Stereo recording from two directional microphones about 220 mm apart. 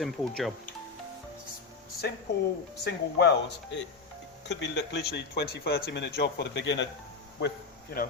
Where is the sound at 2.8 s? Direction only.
50° left (ahead or behind).